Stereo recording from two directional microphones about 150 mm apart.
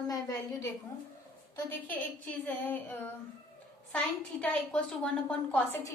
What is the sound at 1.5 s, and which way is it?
A woman's voice, 10° left (ahead or behind).